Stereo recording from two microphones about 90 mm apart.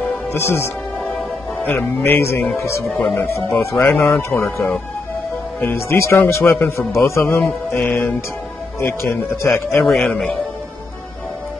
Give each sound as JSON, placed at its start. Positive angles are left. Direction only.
{"t": 0.3, "sound": "a man's voice", "side_deg": 30}
{"t": 9.8, "sound": "speech", "side_deg": 10}